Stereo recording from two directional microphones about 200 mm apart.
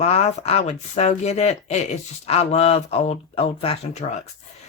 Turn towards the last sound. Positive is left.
turn(degrees=30)  # may be behind; listen again after turning